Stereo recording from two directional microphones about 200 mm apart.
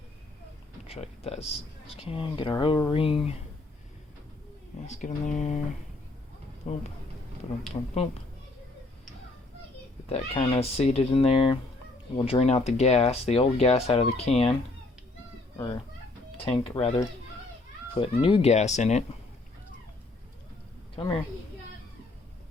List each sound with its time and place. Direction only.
0.9 s speech: 30° left (ahead or behind)
4.9 s speech: 40° left (ahead or behind)
6.6 s speech: 35° left (ahead or behind)
10.1 s speech: 30° left (ahead or behind)
16.4 s speech: 25° left (ahead or behind)
17.9 s speech: 25° left (ahead or behind)
20.9 s speech: 25° left (ahead or behind)